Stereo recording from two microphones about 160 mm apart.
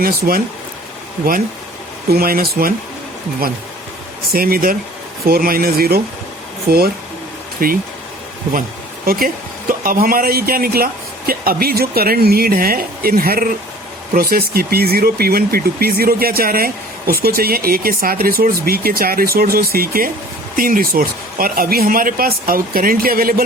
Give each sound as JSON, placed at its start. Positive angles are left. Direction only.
{"t": 0.0, "sound": "speech", "side_deg": -65}
{"t": 2.0, "sound": "speech", "side_deg": -70}
{"t": 4.3, "sound": "speech", "side_deg": -65}
{"t": 7.6, "sound": "speech", "side_deg": -65}
{"t": 9.0, "sound": "speech", "side_deg": -65}